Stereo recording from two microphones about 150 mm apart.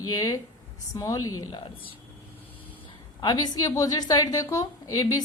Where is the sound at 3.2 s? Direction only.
25° left (ahead or behind).